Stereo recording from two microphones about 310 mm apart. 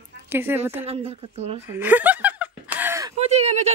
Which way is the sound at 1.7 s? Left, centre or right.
Centre.